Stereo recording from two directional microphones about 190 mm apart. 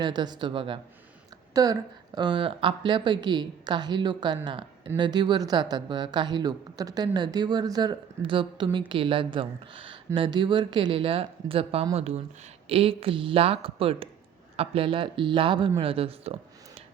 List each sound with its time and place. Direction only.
0.0 s speech: 20° right (ahead or behind)